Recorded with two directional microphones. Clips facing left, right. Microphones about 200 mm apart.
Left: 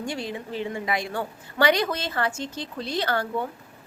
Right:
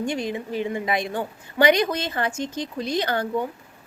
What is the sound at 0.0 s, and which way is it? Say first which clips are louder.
A woman's voice: right 5 dB; 20° right (ahead or behind).